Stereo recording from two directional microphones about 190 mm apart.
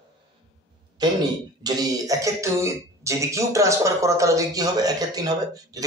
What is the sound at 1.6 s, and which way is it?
Speech, 20° right (ahead or behind).